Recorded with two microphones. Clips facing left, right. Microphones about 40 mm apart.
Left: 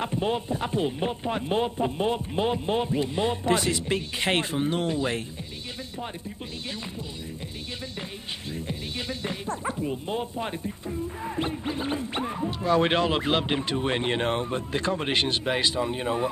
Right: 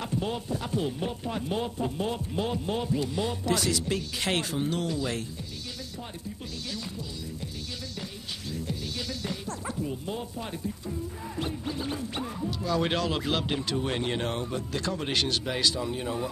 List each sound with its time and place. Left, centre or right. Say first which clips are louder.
0.0 s speech: left 4 dB; left
8.5 s speech: even; left